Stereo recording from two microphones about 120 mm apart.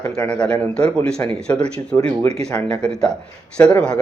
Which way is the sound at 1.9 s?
20° left (ahead or behind).